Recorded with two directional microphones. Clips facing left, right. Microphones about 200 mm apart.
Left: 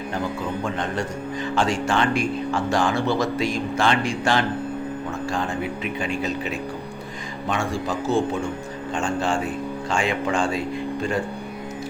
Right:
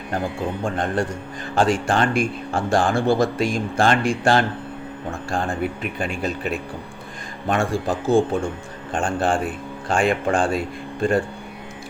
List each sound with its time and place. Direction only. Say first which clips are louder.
0.6 s speech: right 6 dB; 50° right (ahead or behind)